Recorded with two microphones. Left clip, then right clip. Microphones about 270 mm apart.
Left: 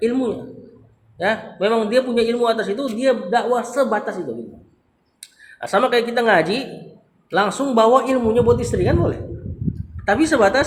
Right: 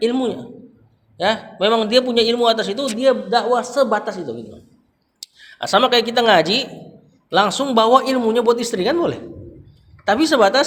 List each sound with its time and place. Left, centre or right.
0.0 s a man's voice: right
5.5 s a man's voice: right
10.1 s a man's voice: right